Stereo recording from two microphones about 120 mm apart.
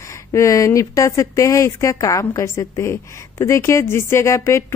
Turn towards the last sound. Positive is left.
turn(degrees=25)  # may be behind; listen again after turning